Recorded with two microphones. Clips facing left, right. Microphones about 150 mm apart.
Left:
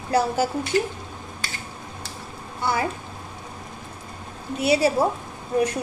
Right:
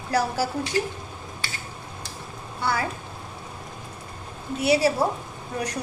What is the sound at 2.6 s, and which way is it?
Speech, 20° left (ahead or behind).